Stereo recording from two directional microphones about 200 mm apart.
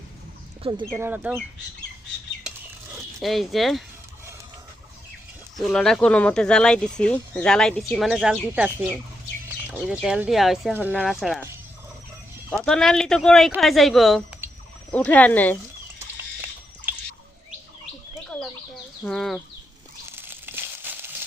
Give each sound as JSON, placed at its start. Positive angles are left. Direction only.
{"t": 0.6, "sound": "speech", "side_deg": -25}
{"t": 0.9, "sound": "speech", "side_deg": -10}
{"t": 3.2, "sound": "speech", "side_deg": 0}
{"t": 5.5, "sound": "speech", "side_deg": 0}
{"t": 12.6, "sound": "speech", "side_deg": 5}
{"t": 19.0, "sound": "speech", "side_deg": 0}
{"t": 20.1, "sound": "a sound", "side_deg": -10}